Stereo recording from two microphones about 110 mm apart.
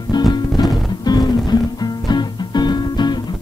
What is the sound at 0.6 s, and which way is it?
Music, 35° left (ahead or behind).